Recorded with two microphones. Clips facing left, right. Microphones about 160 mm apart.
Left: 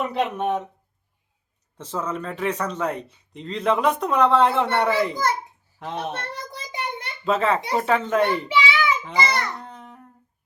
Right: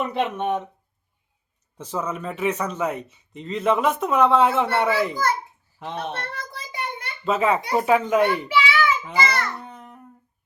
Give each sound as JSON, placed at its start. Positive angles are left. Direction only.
{"t": 0.0, "sound": "speech", "side_deg": 0}
{"t": 1.8, "sound": "speech", "side_deg": -10}
{"t": 6.5, "sound": "child singing", "side_deg": 20}
{"t": 7.3, "sound": "speech", "side_deg": -10}
{"t": 8.4, "sound": "child singing", "side_deg": 15}
{"t": 9.1, "sound": "a child's voice", "side_deg": 15}
{"t": 9.6, "sound": "baby cry", "side_deg": -5}